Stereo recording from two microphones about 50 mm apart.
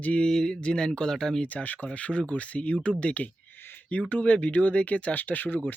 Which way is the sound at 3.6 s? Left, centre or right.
Left.